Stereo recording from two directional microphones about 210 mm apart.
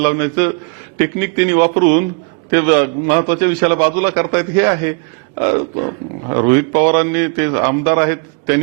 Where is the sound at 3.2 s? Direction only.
10° right (ahead or behind).